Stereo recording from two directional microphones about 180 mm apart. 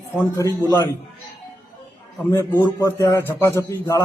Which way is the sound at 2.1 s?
10° left (ahead or behind).